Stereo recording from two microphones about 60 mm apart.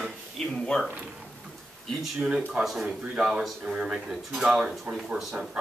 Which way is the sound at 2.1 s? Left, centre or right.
Centre.